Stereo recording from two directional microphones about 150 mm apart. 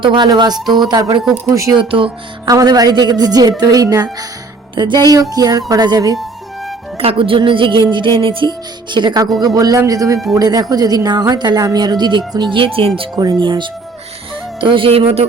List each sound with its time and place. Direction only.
0.0 s speech: 30° right (ahead or behind)
7.0 s music: 35° right (ahead or behind)
9.6 s speech: 20° right (ahead or behind)
13.0 s music: 30° right (ahead or behind)